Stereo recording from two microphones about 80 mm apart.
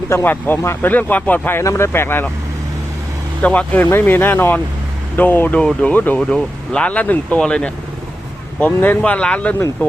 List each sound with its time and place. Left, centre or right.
0.1 s speech: left
3.4 s speech: centre
8.6 s speech: left